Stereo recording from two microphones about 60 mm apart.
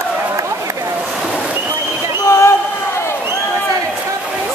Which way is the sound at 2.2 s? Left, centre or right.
Left.